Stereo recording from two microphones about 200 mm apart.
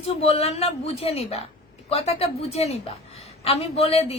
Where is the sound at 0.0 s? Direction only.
30° left (ahead or behind).